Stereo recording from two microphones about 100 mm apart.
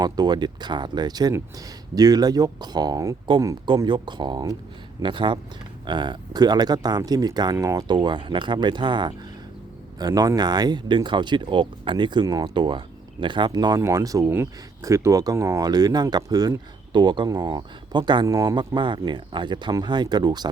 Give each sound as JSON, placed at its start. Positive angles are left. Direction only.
{"t": 0.0, "sound": "speech", "side_deg": -45}
{"t": 7.5, "sound": "speech", "side_deg": -30}
{"t": 7.9, "sound": "speech", "side_deg": -50}
{"t": 10.0, "sound": "speech", "side_deg": -40}
{"t": 12.2, "sound": "speech", "side_deg": -40}
{"t": 12.5, "sound": "speech", "side_deg": -55}
{"t": 18.3, "sound": "speech", "side_deg": -35}
{"t": 18.5, "sound": "speech", "side_deg": -50}